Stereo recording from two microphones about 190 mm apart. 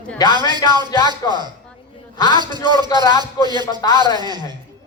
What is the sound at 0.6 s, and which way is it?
Speech, 20° right (ahead or behind).